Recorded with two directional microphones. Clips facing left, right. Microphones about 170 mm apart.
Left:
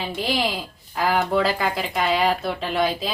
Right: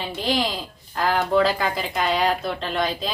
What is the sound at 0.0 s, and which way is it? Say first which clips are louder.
A woman's voice: even; 5° left (ahead or behind).